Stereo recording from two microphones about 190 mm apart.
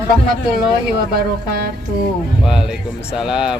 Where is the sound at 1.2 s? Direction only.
50° right (ahead or behind).